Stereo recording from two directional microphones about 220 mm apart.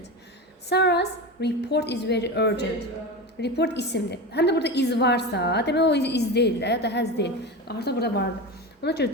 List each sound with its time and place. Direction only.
0.7 s a woman's voice: 50° left (ahead or behind)